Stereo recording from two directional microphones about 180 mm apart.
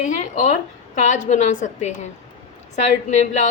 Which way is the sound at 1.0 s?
40° left (ahead or behind).